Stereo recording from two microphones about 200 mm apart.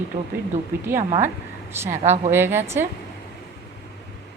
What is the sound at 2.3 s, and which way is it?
Speech, 10° right (ahead or behind).